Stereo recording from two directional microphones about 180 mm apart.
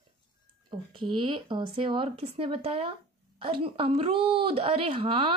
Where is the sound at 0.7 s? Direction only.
25° right (ahead or behind).